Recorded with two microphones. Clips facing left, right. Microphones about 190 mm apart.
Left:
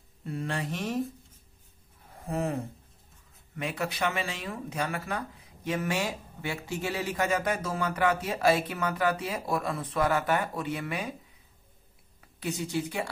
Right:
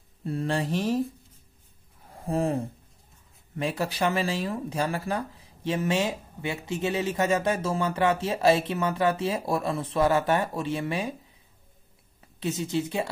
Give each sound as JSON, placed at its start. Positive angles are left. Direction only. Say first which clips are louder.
{"t": 0.2, "sound": "mantra", "louder": "right 5 dB", "side_deg": -35}
{"t": 2.2, "sound": "mantra", "louder": "right 4 dB", "side_deg": -30}
{"t": 3.5, "sound": "speech", "louder": "right 4 dB", "side_deg": -30}
{"t": 12.2, "sound": "a woman's voice", "louder": "right 3 dB", "side_deg": -25}